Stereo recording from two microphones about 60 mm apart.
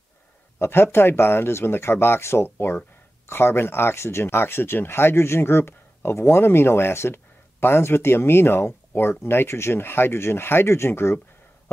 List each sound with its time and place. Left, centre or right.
0.6 s speech: left